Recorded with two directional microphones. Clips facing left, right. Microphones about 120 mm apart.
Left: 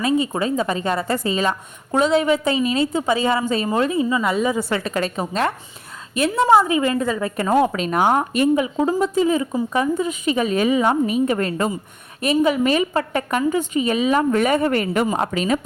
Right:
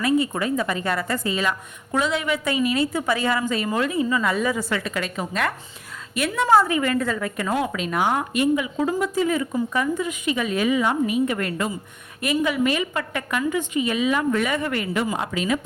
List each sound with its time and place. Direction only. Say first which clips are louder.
0.0 s a woman's voice: left 2 dB; 25° left (ahead or behind)
6.5 s a woman's voice: left 1 dB; 20° left (ahead or behind); by 15.6 s 40° left (ahead or behind)